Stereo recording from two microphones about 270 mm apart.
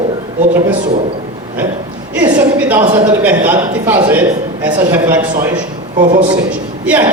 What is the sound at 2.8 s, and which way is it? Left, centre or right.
Speech, centre.